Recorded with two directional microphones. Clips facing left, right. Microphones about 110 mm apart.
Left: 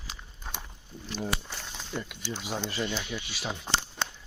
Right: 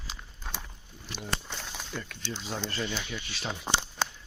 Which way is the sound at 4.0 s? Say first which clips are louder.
Right 2 dB; 5° right (ahead or behind).